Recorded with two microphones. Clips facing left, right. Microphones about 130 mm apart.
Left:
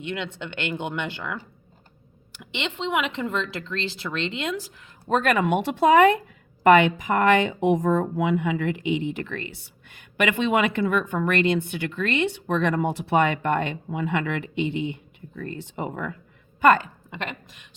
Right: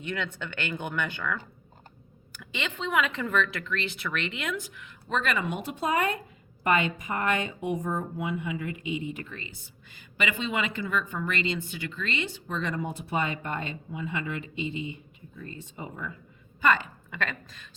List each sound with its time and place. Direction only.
0.0 s speech: 20° left (ahead or behind); by 16.1 s 70° left (ahead or behind)
16.6 s a woman's voice: 50° left (ahead or behind)
17.1 s speech: 20° left (ahead or behind)